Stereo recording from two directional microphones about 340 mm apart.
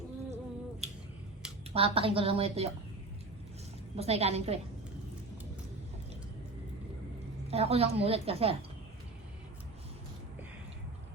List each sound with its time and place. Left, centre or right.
0.8 s finger snapping: centre
1.7 s a woman's voice: centre
3.9 s a woman's voice: centre
7.5 s a woman's voice: centre